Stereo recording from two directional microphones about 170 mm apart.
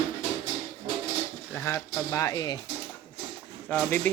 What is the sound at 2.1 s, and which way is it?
Speech, 20° left (ahead or behind).